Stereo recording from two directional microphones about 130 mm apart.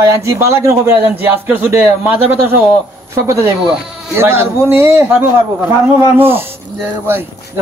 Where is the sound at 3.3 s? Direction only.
25° right (ahead or behind).